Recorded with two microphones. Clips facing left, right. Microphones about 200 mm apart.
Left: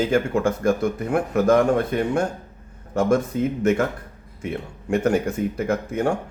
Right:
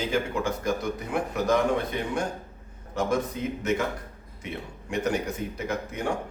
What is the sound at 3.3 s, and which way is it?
A man's voice, 45° left (ahead or behind).